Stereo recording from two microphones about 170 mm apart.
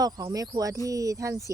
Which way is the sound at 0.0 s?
20° right (ahead or behind).